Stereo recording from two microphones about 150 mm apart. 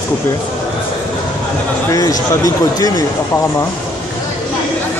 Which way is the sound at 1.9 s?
25° left (ahead or behind).